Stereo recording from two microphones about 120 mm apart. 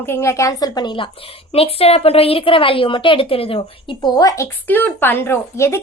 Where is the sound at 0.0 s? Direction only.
20° left (ahead or behind); by 1.1 s 40° left (ahead or behind).